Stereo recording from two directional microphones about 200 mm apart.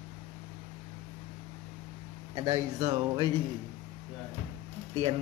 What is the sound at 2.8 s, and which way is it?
Speech, 30° right (ahead or behind).